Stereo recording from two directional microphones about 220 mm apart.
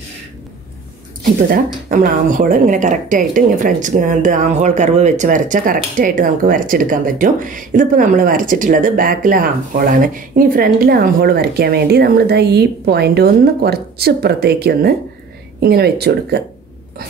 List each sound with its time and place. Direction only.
1.9 s speech: 35° right (ahead or behind)